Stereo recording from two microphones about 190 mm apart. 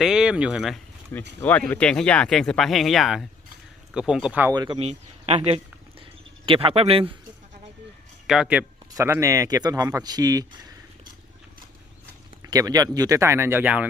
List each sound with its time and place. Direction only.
0.0 s speech: 5° right (ahead or behind)
4.5 s speech: 25° right (ahead or behind)
6.4 s speech: 30° right (ahead or behind)
8.3 s speech: 5° right (ahead or behind)
12.5 s speech: 20° right (ahead or behind)